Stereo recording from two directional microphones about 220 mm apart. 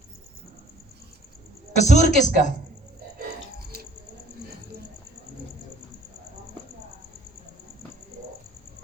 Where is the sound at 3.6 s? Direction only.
45° right (ahead or behind).